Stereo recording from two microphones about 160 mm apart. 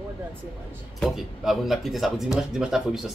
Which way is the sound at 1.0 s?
Centre (ahead or behind).